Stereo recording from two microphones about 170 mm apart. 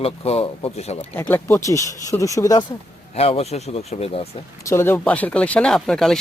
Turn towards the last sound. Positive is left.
turn(degrees=0)  # may be behind; listen again after turning